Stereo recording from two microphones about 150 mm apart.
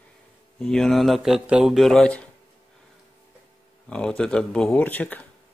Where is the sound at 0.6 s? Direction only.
5° left (ahead or behind).